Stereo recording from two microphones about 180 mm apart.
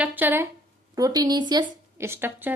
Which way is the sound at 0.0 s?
10° right (ahead or behind).